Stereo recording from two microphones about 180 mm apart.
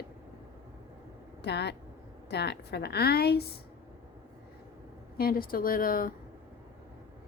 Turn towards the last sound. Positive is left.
turn(degrees=55)  # may be behind; listen again after turning